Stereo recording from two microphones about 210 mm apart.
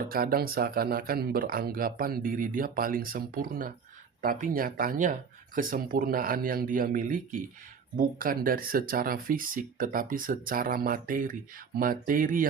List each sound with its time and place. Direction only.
0.1 s speech: 45° right (ahead or behind)